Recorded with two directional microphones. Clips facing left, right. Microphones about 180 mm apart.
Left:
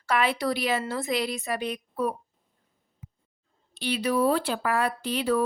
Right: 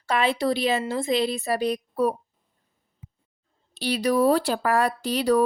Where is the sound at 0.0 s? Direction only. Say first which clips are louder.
Right 2 dB; 25° right (ahead or behind).